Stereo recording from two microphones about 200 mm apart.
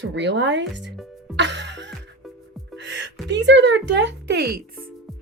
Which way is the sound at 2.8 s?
65° right (ahead or behind).